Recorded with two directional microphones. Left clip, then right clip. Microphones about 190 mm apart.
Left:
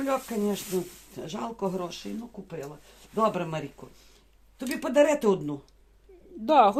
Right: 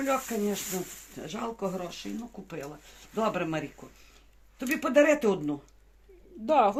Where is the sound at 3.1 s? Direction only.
60° left (ahead or behind).